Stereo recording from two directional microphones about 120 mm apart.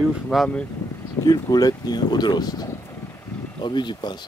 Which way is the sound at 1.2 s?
35° left (ahead or behind).